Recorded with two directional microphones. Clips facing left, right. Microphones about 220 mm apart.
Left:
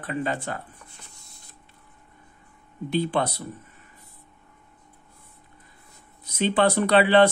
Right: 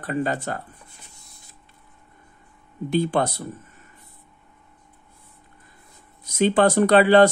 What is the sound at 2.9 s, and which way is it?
Speech, 45° right (ahead or behind).